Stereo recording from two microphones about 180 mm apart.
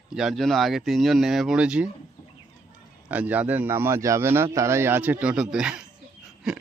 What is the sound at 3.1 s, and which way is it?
A man's voice, 10° right (ahead or behind).